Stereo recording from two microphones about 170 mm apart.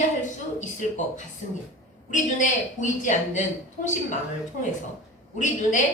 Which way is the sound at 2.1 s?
45° left (ahead or behind).